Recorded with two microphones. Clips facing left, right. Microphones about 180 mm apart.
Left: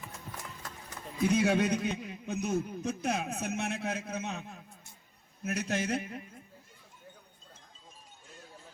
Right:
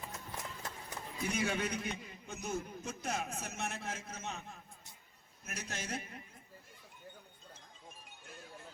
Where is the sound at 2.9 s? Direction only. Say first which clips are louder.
Left 5 dB; 65° left (ahead or behind).